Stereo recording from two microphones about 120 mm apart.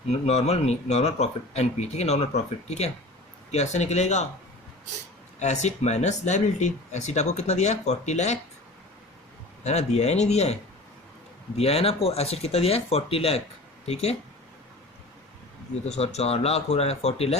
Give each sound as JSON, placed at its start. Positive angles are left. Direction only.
{"t": 0.1, "sound": "a man's voice", "side_deg": 65}
{"t": 5.4, "sound": "speech", "side_deg": 70}
{"t": 9.6, "sound": "a man's voice", "side_deg": 70}
{"t": 15.9, "sound": "a man's voice", "side_deg": 60}